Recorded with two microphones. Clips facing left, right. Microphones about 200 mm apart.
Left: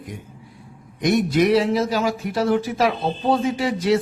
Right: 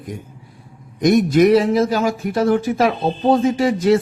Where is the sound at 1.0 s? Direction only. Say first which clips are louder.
Right 5 dB; 45° right (ahead or behind).